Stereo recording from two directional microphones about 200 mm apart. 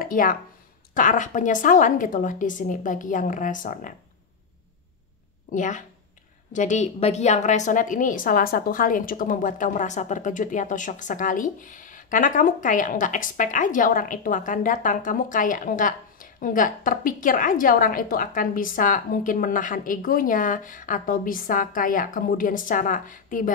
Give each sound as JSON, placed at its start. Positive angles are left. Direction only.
{"t": 0.0, "sound": "a woman's voice", "side_deg": 45}
{"t": 5.5, "sound": "a woman's voice", "side_deg": 40}